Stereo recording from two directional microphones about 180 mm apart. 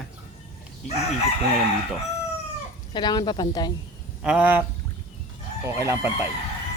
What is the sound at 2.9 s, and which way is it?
Speech, 25° left (ahead or behind).